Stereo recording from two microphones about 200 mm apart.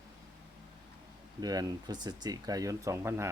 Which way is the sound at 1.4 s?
20° right (ahead or behind).